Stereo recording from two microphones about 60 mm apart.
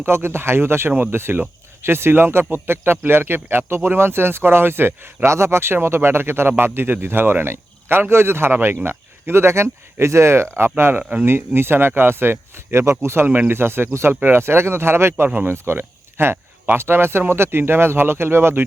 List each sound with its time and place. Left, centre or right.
0.0 s speech: right
12.8 s speech: right
13.2 s speech: right